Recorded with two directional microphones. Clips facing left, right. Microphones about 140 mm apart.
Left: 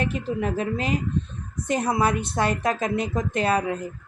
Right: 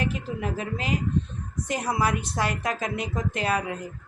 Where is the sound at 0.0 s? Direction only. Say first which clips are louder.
Left 3 dB; 25° left (ahead or behind).